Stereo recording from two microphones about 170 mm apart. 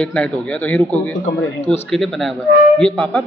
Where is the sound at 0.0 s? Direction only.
5° left (ahead or behind).